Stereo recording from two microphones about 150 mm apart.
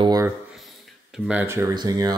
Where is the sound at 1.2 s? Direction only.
15° right (ahead or behind).